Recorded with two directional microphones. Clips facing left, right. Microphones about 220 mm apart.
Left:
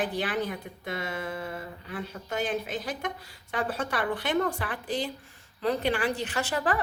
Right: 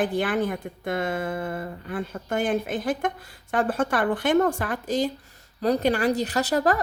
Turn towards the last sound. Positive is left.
turn(degrees=-40)  # may be behind; listen again after turning